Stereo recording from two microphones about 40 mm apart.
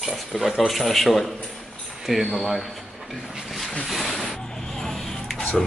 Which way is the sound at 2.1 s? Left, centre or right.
Centre.